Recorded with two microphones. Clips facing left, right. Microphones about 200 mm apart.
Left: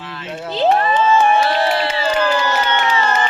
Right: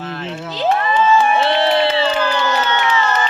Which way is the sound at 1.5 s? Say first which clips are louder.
Right 3 dB; 25° right (ahead or behind).